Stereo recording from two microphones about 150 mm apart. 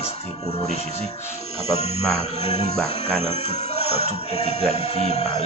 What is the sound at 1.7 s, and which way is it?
Speech, 45° left (ahead or behind).